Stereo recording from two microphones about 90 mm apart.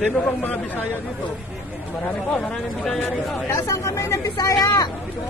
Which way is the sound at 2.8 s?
10° left (ahead or behind).